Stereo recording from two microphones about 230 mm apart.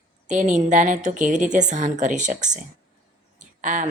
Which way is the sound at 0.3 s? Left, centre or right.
Right.